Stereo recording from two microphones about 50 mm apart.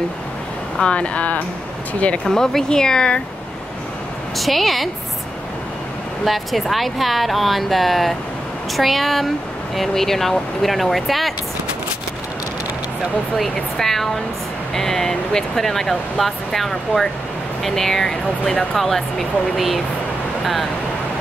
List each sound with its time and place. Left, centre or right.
0.7 s speech: left
2.2 s speech: centre
4.4 s speech: centre
6.2 s speech: centre
13.4 s speech: centre
18.4 s speech: centre
18.8 s speech: centre